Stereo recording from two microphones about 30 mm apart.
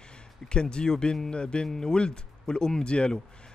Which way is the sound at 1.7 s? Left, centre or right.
Left.